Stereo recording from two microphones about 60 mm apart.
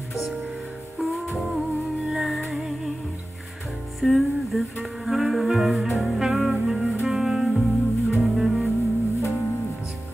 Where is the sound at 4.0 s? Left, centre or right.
Centre.